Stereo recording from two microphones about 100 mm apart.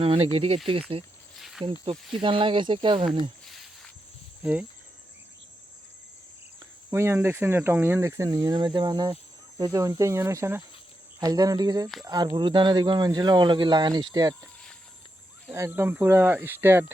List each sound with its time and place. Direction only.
0.0 s speech: 70° right (ahead or behind)
1.4 s cricket: 5° right (ahead or behind)
2.2 s speech: 60° right (ahead or behind)
3.4 s a sound: centre (ahead or behind)
6.9 s speech: 25° right (ahead or behind)
8.4 s speech: 50° right (ahead or behind); by 10.6 s 25° right (ahead or behind)
11.2 s speech: 40° right (ahead or behind)
15.5 s speech: 25° right (ahead or behind)